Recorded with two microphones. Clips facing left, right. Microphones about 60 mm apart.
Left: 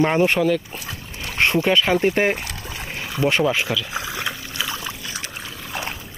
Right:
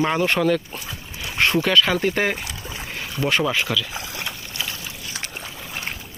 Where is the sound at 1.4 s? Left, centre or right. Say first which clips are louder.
Even; left.